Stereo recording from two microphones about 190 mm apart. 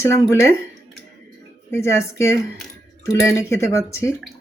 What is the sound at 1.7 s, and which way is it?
Speech, 15° left (ahead or behind).